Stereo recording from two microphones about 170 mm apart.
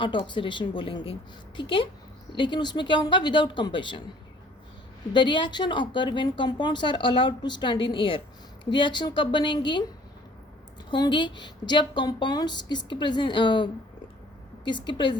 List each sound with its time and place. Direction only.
0.0 s a woman's voice: 30° left (ahead or behind)
2.3 s a woman's voice: 30° left (ahead or behind)
5.1 s a woman's voice: 25° left (ahead or behind)
10.8 s a woman's voice: 25° left (ahead or behind)